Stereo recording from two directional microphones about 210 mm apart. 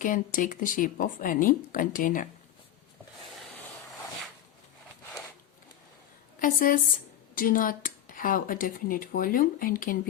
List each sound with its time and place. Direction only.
0.0 s speech: 40° left (ahead or behind)
6.4 s speech: 40° left (ahead or behind)